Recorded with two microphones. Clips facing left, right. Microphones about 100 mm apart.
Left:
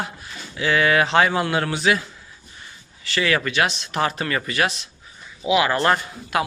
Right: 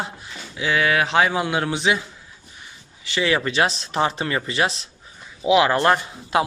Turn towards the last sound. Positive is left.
turn(degrees=-30)  # may be behind; listen again after turning